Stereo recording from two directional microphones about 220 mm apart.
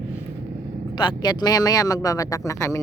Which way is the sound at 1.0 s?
20° left (ahead or behind).